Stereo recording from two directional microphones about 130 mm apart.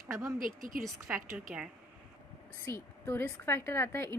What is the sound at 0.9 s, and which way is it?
Speech, 10° right (ahead or behind).